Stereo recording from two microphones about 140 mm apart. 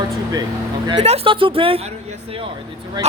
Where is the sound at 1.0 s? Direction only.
45° right (ahead or behind).